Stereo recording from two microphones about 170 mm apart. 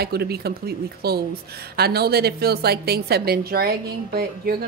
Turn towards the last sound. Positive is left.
turn(degrees=-60)  # may be behind; listen again after turning